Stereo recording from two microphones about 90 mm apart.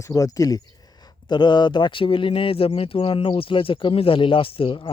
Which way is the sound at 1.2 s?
55° left (ahead or behind).